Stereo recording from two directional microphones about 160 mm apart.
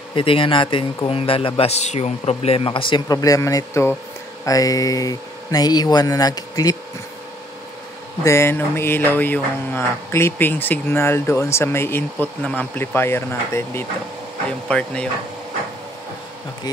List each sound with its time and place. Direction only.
0.1 s a man's voice: 35° left (ahead or behind)
8.2 s mantra: 15° left (ahead or behind)